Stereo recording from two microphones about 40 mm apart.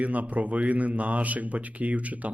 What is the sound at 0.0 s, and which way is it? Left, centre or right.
Speech, right.